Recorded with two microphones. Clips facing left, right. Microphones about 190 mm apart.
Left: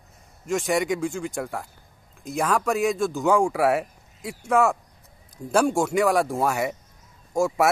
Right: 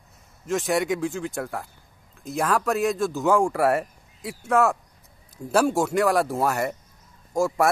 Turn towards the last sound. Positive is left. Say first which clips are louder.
# even
turn(degrees=0)  # may be behind; listen again after turning